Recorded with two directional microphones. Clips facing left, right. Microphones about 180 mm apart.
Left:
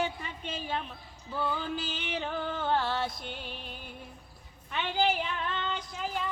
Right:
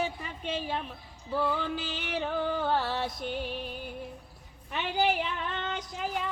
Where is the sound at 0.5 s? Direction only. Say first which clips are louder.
Right 1 dB; 5° right (ahead or behind).